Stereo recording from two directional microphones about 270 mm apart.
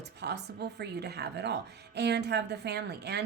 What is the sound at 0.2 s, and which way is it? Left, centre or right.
A woman's voice, right.